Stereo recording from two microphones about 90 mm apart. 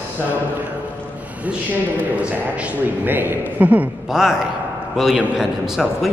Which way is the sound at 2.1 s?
15° right (ahead or behind).